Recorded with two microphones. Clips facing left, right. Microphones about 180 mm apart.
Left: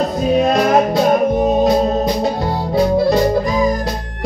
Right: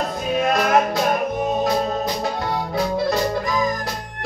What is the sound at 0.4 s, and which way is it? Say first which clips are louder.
Music: left 4 dB; 35° left (ahead or behind).